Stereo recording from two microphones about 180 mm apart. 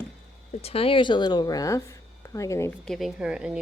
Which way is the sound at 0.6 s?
30° left (ahead or behind).